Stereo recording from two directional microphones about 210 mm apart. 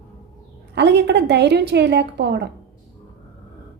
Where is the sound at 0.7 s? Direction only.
55° right (ahead or behind).